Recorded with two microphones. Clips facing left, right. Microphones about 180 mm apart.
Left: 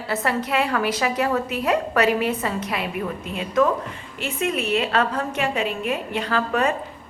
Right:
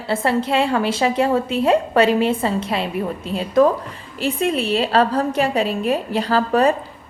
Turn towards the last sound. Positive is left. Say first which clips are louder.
# right 5 dB
turn(degrees=-35)  # may be behind; listen again after turning